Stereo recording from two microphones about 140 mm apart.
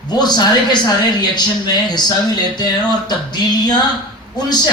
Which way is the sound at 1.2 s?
30° left (ahead or behind).